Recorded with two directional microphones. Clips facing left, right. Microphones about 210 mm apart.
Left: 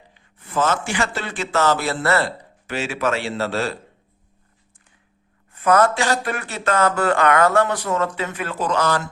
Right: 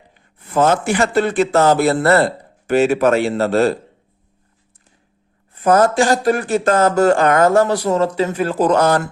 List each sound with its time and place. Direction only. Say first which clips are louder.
0.1 s a sound: right 5 dB; 40° right (ahead or behind)
1.0 s speech: right 11 dB; 55° right (ahead or behind)
1.5 s speech: right 6 dB; 35° right (ahead or behind)
1.7 s a man's voice: right 7 dB; 50° right (ahead or behind)
5.5 s a sound: right 3 dB; 35° right (ahead or behind)
5.9 s a man's voice: right 8 dB; 45° right (ahead or behind)